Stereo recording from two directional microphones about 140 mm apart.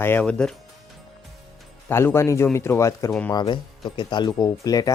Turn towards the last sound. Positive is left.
turn(degrees=25)  # may be behind; listen again after turning